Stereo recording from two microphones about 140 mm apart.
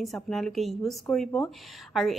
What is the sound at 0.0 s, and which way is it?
A woman's voice, centre (ahead or behind).